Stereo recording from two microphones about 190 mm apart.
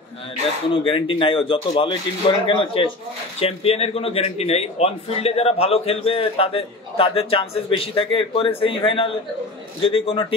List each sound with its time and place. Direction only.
0.7 s a man's voice: 25° left (ahead or behind)